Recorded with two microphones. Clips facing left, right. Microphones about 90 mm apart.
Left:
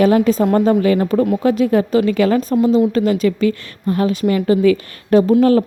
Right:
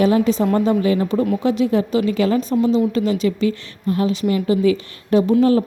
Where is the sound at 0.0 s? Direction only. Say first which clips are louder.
Left 3 dB; 50° left (ahead or behind).